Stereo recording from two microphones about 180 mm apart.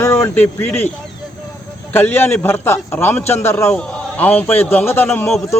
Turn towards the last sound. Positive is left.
turn(degrees=10)  # may be behind; listen again after turning